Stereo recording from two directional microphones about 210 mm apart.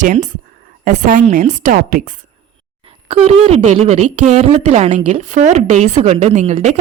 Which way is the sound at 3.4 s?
30° right (ahead or behind).